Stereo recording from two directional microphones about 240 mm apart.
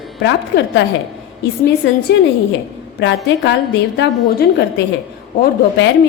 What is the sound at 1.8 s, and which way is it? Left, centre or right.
Speech, left.